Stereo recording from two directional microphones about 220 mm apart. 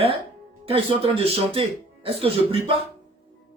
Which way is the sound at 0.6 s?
25° right (ahead or behind).